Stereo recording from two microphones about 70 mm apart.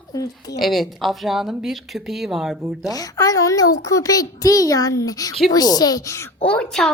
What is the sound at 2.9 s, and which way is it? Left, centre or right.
A child's voice, left.